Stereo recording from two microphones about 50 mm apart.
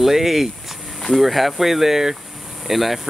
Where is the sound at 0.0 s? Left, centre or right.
Centre.